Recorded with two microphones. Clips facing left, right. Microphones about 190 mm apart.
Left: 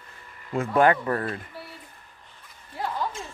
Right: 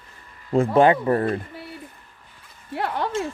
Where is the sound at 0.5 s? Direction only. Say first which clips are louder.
Right 4 dB; 25° right (ahead or behind).